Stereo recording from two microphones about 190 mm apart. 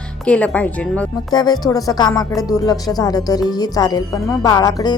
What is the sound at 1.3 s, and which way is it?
Speech, 20° left (ahead or behind).